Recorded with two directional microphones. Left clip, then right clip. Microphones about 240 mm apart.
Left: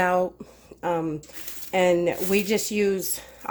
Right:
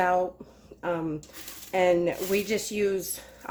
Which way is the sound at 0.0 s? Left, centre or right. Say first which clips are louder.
Left 2 dB; left.